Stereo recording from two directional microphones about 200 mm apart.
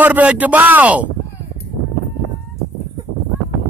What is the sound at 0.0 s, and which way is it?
Speech, 10° right (ahead or behind).